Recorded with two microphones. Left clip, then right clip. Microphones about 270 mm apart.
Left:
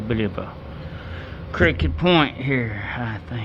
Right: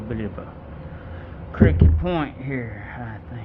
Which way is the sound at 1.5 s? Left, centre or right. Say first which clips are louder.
Left 2 dB; left.